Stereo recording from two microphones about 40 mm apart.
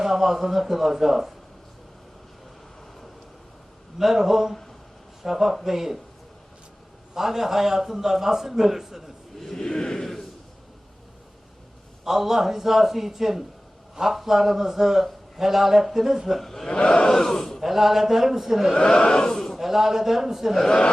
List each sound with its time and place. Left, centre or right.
0.0 s a man's voice: centre
3.9 s a man's voice: centre
7.1 s a man's voice: centre
9.4 s a sound: centre
12.0 s a man's voice: centre
16.4 s speech: centre
16.6 s a sound: centre
17.6 s a man's voice: centre
18.8 s a sound: left
19.3 s a man's voice: centre
19.5 s a man's voice: centre
20.6 s a sound: centre